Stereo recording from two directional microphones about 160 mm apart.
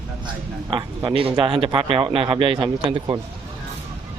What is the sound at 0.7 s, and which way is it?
A man's voice, 30° right (ahead or behind).